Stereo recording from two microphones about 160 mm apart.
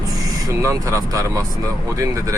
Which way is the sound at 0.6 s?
20° right (ahead or behind).